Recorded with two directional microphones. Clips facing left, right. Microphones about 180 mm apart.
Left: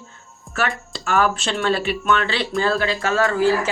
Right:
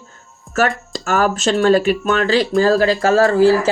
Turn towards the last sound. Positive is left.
turn(degrees=-35)  # may be behind; listen again after turning